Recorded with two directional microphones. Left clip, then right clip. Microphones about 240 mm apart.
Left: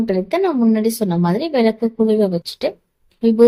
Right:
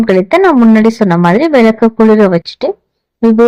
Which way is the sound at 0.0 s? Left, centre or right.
Right.